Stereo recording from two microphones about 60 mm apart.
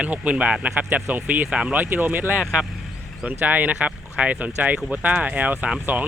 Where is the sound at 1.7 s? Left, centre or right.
Right.